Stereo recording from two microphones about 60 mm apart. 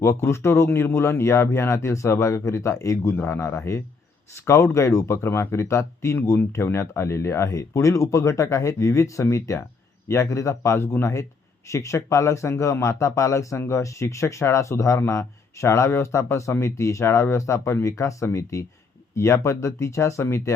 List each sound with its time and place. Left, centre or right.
0.0 s speech: left
10.2 s speech: left
19.1 s speech: left